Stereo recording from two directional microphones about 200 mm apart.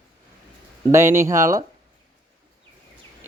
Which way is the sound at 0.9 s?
15° right (ahead or behind).